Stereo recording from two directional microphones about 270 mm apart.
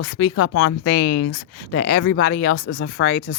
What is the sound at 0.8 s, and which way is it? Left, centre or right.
Speech, left.